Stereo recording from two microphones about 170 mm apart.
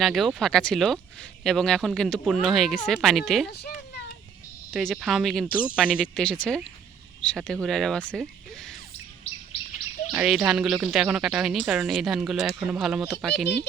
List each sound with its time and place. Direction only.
0.0 s speech: centre (ahead or behind)
3.5 s a child's voice: 70° left (ahead or behind)
4.7 s speech: 5° left (ahead or behind)
6.2 s speech: 5° left (ahead or behind)
10.1 s speech: 5° right (ahead or behind)